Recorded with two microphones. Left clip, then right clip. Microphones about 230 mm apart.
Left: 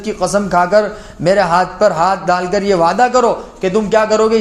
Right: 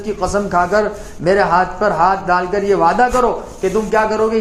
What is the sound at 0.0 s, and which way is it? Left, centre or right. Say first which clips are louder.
A man's voice: left 2 dB; left.